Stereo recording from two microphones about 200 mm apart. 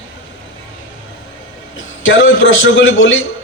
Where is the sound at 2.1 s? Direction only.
75° left (ahead or behind).